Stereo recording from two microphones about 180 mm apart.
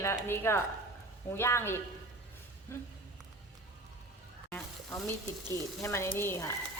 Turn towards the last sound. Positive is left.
turn(degrees=15)  # may be behind; listen again after turning